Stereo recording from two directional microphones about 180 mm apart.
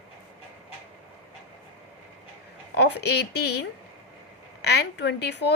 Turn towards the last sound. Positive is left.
turn(degrees=70)  # may be behind; listen again after turning